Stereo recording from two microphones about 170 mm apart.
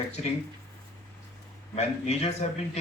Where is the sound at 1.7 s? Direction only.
40° left (ahead or behind).